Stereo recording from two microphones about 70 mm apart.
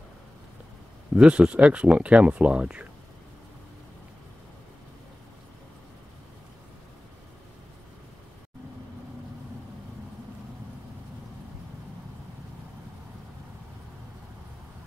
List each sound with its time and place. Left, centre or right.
1.1 s speech: centre